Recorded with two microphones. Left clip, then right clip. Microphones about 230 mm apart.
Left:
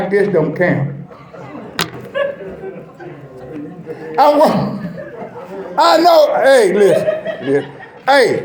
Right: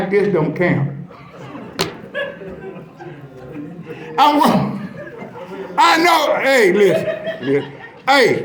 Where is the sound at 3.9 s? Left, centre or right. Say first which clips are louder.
Left 2 dB; right.